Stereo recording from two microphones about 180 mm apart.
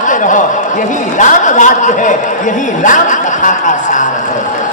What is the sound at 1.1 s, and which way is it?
A man's voice, 45° left (ahead or behind).